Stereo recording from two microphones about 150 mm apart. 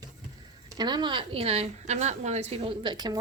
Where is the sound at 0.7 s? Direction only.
30° right (ahead or behind).